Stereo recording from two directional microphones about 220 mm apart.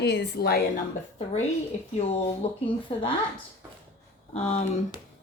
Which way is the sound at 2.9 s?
25° left (ahead or behind).